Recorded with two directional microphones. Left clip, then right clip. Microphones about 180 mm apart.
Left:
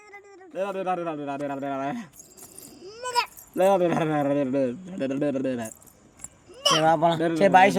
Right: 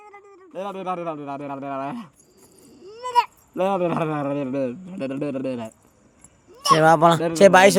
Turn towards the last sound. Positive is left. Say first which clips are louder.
# right 5 dB
turn(degrees=-90)